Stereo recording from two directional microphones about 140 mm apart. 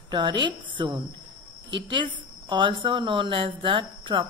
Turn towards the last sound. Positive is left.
turn(degrees=-35)  # may be behind; listen again after turning